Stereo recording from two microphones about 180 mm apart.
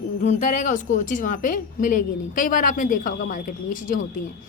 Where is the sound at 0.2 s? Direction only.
45° left (ahead or behind).